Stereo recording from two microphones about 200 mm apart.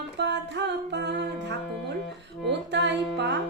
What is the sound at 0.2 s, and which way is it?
Music, 60° right (ahead or behind).